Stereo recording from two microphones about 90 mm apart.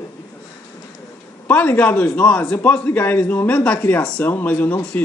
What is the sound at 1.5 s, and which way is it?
A man's voice, 15° left (ahead or behind).